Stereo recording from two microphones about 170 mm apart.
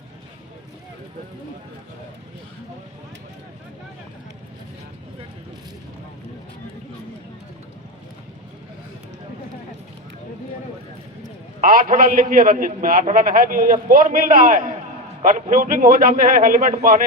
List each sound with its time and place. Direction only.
11.6 s a man's voice: 55° right (ahead or behind)